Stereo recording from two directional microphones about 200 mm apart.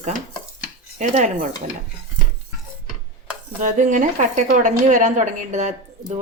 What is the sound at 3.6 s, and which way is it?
Speech, 40° right (ahead or behind).